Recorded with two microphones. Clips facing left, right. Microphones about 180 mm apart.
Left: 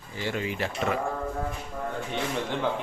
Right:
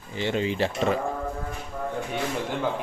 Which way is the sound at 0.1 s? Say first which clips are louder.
Right 5 dB; 25° right (ahead or behind).